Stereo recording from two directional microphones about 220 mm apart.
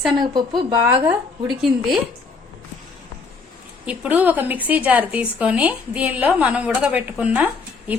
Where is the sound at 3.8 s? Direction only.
5° right (ahead or behind).